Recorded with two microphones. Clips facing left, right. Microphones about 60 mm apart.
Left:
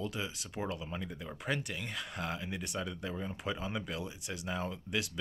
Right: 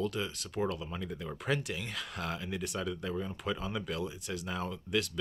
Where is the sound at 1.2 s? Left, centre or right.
Centre.